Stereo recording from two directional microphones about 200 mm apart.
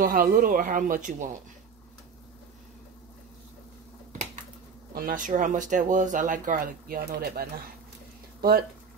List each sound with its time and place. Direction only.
0.0 s speech: 45° right (ahead or behind)
4.9 s speech: 45° right (ahead or behind)